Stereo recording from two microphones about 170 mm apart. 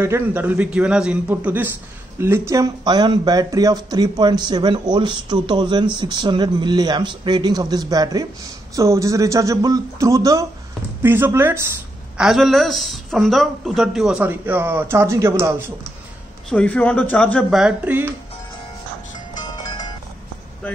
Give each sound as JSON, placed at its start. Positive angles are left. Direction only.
{"t": 0.0, "sound": "a man's voice", "side_deg": -10}
{"t": 12.2, "sound": "speech", "side_deg": 0}
{"t": 16.4, "sound": "speech", "side_deg": 5}
{"t": 19.4, "sound": "music", "side_deg": 25}